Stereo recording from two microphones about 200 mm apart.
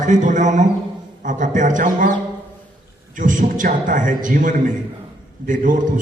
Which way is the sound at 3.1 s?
40° right (ahead or behind).